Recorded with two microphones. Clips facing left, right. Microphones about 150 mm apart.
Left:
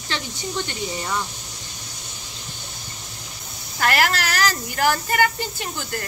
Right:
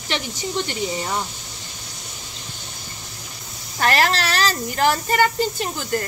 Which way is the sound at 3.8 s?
30° right (ahead or behind).